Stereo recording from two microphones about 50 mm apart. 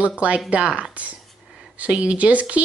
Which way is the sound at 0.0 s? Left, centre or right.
Right.